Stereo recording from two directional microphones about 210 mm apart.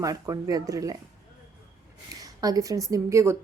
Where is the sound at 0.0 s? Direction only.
15° right (ahead or behind).